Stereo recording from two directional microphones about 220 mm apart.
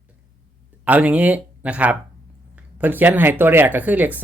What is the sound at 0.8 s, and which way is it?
Speech, 5° right (ahead or behind).